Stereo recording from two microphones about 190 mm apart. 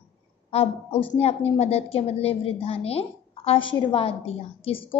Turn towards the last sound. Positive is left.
turn(degrees=30)  # may be behind; listen again after turning